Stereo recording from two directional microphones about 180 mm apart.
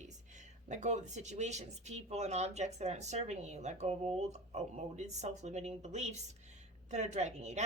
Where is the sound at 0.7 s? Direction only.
40° right (ahead or behind).